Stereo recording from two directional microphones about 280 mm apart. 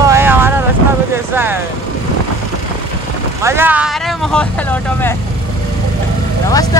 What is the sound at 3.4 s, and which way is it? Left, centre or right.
Speech, centre.